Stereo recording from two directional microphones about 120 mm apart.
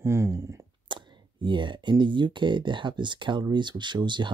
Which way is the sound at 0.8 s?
40° right (ahead or behind).